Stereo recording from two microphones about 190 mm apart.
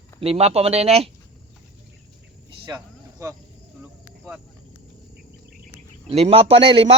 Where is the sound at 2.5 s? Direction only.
25° right (ahead or behind).